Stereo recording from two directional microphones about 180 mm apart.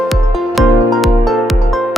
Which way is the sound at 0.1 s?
Centre (ahead or behind).